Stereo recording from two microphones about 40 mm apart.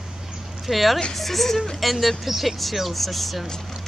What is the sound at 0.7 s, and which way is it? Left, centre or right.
Speech, centre.